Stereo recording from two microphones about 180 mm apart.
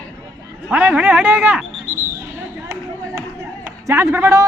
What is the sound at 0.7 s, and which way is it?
Speech, 5° right (ahead or behind).